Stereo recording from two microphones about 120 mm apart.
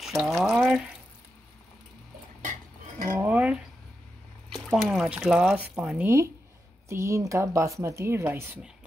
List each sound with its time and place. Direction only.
0.0 s water tap: centre (ahead or behind)
3.2 s a sound: 10° right (ahead or behind)
4.6 s speech: centre (ahead or behind)
6.9 s speech: 25° right (ahead or behind)